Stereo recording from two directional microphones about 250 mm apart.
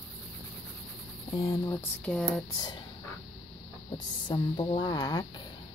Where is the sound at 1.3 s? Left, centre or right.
Centre.